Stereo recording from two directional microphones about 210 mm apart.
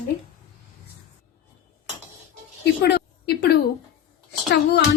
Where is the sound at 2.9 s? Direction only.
50° left (ahead or behind).